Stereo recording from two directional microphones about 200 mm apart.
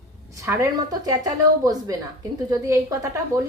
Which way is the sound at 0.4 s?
15° right (ahead or behind).